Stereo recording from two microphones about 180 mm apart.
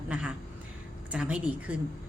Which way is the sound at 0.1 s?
5° right (ahead or behind).